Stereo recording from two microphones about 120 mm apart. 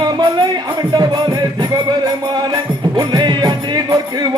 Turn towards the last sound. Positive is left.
turn(degrees=-35)  # may be behind; listen again after turning